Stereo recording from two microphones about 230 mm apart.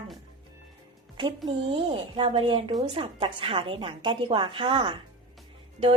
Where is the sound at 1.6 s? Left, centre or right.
Right.